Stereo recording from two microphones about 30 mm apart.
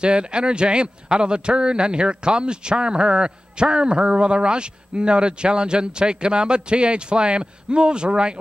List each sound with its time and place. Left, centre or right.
0.0 s a man's voice: right